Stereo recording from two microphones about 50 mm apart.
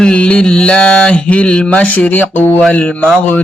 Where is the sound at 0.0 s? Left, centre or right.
Centre; by 2.6 s left.